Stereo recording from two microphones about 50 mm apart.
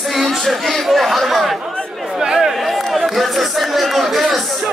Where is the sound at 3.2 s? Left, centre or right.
Centre.